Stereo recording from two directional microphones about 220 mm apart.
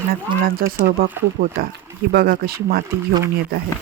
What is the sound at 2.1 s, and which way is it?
Speech, 45° right (ahead or behind).